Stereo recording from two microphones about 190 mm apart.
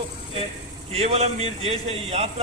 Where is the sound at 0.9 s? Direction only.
35° right (ahead or behind).